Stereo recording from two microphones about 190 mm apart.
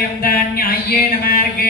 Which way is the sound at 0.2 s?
50° left (ahead or behind).